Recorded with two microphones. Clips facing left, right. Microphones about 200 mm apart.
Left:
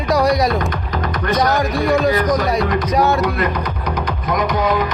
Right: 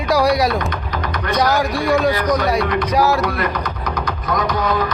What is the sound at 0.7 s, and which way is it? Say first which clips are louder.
Music: left 2 dB; 50° left (ahead or behind).